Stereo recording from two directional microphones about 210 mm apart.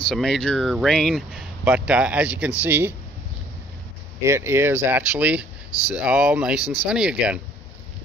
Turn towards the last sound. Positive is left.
turn(degrees=-5)  # may be behind; listen again after turning